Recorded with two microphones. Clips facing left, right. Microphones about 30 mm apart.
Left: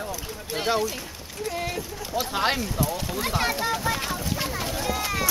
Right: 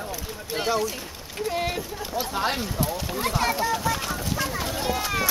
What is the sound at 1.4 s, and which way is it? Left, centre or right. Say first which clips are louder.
Speech: right 3 dB; centre.